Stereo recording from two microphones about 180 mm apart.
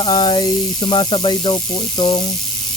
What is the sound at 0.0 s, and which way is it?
Speech, 25° left (ahead or behind).